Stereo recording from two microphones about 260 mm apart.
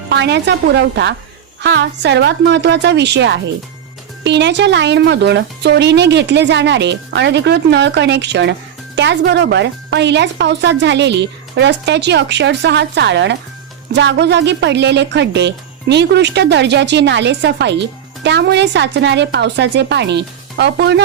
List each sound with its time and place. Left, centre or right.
0.1 s a woman's voice: right